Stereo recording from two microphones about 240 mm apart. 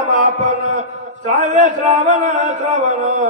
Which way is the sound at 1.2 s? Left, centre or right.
Right.